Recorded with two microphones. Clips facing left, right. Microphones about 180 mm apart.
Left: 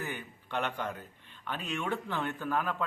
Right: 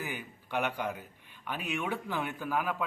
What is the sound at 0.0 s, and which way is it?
Speech, 10° right (ahead or behind).